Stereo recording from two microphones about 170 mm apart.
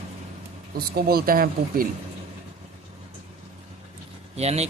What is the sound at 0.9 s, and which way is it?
Speech, 65° right (ahead or behind).